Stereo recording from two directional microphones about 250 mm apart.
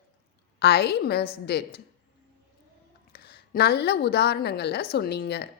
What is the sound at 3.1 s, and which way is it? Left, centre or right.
A woman's voice, left.